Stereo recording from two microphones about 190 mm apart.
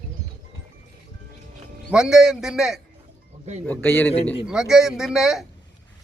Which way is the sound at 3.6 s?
10° left (ahead or behind).